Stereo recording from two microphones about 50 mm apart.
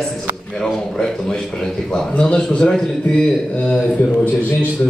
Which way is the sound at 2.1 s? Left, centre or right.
Left.